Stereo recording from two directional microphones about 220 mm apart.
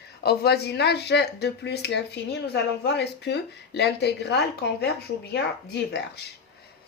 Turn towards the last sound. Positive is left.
turn(degrees=50)  # may be behind; listen again after turning